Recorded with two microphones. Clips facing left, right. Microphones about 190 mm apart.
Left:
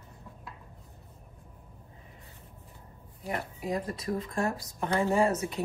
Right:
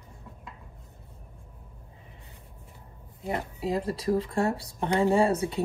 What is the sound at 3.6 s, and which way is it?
Speech, 30° right (ahead or behind).